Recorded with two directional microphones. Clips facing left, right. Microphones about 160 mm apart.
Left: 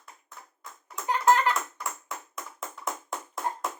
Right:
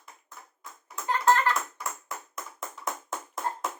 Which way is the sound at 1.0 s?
15° left (ahead or behind).